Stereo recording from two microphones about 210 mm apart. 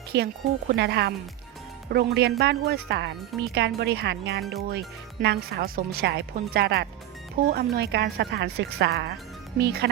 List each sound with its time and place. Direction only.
0.1 s speech: 55° right (ahead or behind)